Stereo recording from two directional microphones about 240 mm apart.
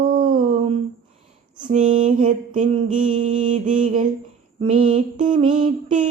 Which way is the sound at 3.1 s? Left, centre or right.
Right.